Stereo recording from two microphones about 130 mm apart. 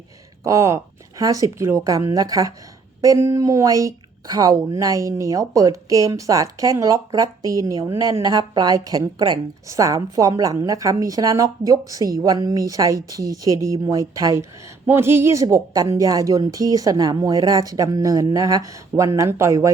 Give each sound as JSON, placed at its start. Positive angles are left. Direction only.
{"t": 0.4, "sound": "speech", "side_deg": -25}